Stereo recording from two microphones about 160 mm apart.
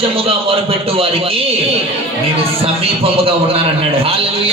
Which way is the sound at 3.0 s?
35° right (ahead or behind).